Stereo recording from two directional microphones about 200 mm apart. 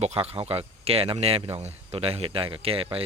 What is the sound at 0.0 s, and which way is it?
Speech, 30° right (ahead or behind).